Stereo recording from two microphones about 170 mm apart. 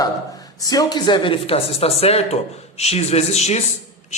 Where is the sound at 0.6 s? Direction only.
20° left (ahead or behind).